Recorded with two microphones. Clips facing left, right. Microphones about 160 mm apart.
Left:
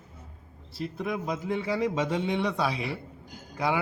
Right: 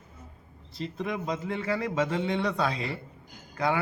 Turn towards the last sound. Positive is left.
turn(degrees=10)  # may be behind; listen again after turning